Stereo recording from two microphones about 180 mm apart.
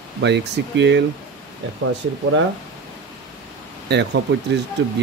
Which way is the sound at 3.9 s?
70° right (ahead or behind).